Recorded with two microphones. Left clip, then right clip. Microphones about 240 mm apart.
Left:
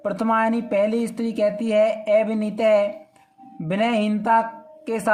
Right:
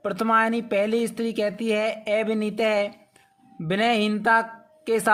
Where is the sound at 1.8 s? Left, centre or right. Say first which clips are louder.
Left 9 dB; right.